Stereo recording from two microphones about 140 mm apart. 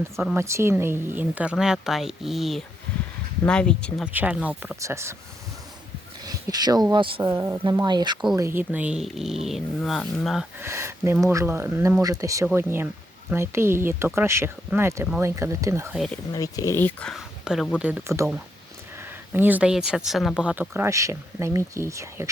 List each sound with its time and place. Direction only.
0.3 s speech: 20° right (ahead or behind); by 4.0 s 5° left (ahead or behind)
4.0 s speech: 10° right (ahead or behind)
4.8 s speech: 20° right (ahead or behind)
6.2 s a sound: 30° right (ahead or behind)
6.9 s speech: 35° right (ahead or behind)
7.3 s speech: 20° right (ahead or behind)
8.4 s speech: 15° right (ahead or behind); by 10.4 s centre (ahead or behind)
10.6 s speech: 20° right (ahead or behind)
16.0 s speech: 5° left (ahead or behind)
16.3 s speech: 25° left (ahead or behind)
17.1 s speech: 5° right (ahead or behind); by 22.3 s 20° right (ahead or behind)